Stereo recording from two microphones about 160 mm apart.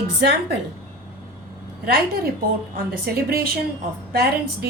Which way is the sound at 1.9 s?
70° right (ahead or behind).